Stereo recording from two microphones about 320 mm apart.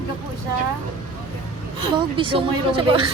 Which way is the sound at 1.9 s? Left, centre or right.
Centre.